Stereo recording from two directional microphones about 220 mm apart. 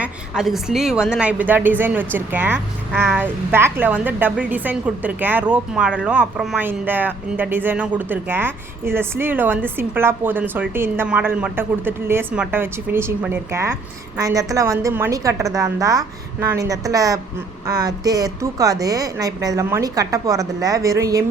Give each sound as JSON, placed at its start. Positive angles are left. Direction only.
{"t": 0.0, "sound": "a woman's voice", "side_deg": 0}